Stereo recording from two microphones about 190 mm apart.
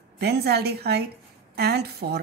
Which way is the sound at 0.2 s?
60° right (ahead or behind).